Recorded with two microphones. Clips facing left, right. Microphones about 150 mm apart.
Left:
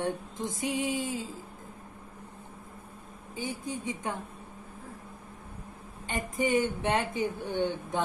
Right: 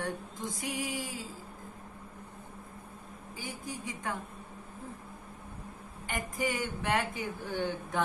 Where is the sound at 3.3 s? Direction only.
25° left (ahead or behind).